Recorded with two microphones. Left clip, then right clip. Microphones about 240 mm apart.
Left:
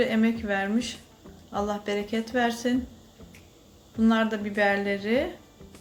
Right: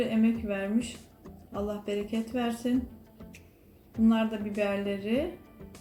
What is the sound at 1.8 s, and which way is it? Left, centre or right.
Speech, left.